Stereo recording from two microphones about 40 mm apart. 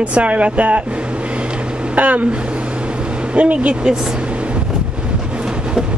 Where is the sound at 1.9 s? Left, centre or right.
Right.